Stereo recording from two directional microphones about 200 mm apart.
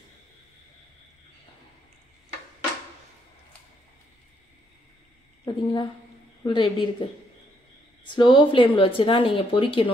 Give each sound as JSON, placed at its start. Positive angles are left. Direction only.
{"t": 5.4, "sound": "a woman's voice", "side_deg": 20}
{"t": 8.1, "sound": "speech", "side_deg": 25}